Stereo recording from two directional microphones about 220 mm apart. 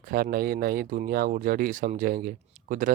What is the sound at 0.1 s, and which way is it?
Speech, 40° right (ahead or behind).